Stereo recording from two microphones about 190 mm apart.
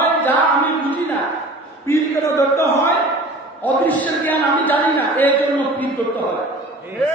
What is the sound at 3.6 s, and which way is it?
A man's voice, 10° left (ahead or behind).